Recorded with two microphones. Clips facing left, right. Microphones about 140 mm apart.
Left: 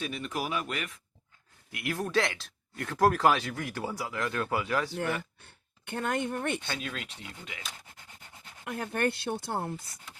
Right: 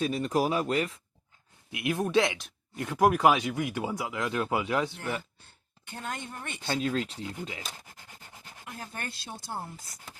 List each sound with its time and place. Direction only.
0.0 s speech: 35° right (ahead or behind)
1.7 s speech: 20° right (ahead or behind)
5.8 s speech: 60° left (ahead or behind)
6.6 s speech: 30° right (ahead or behind)
8.6 s speech: 65° left (ahead or behind)